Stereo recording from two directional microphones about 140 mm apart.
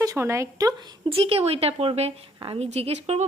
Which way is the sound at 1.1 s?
40° right (ahead or behind).